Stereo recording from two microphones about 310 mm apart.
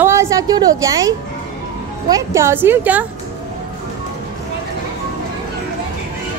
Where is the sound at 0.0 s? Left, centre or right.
Centre.